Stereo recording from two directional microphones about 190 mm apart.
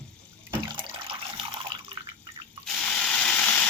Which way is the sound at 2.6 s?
5° left (ahead or behind).